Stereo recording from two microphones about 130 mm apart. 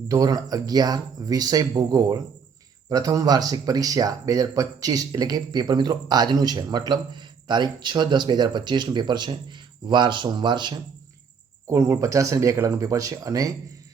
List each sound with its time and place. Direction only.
0.1 s speech: 30° right (ahead or behind)
11.7 s speech: 25° right (ahead or behind)